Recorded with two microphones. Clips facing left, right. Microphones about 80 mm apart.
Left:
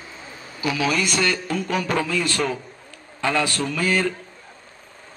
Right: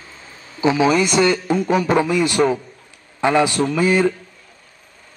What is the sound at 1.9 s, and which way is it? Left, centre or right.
A man's voice, centre.